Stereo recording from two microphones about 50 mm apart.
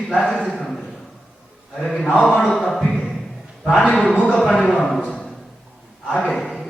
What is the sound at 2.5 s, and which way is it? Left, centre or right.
Speech, centre.